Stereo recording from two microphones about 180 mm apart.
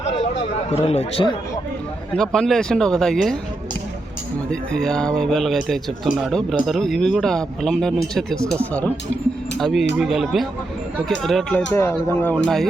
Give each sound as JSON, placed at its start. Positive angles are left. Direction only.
{"t": 0.7, "sound": "speech", "side_deg": 35}
{"t": 2.1, "sound": "speech", "side_deg": 5}
{"t": 4.7, "sound": "speech", "side_deg": 5}
{"t": 11.7, "sound": "speech", "side_deg": 10}